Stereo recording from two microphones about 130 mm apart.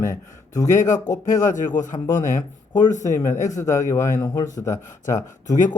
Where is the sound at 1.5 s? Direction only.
75° left (ahead or behind).